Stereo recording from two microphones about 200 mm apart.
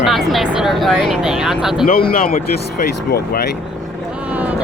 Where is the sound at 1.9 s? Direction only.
50° left (ahead or behind).